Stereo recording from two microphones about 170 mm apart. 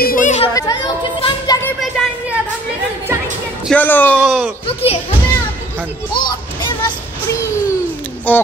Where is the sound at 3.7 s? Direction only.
10° left (ahead or behind).